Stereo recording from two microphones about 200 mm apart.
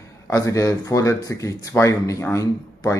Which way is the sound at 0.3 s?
15° left (ahead or behind).